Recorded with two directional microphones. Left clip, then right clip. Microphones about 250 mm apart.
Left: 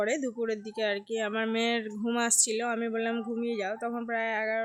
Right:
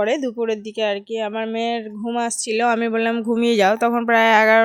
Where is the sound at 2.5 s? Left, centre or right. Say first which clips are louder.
Right 12 dB; right.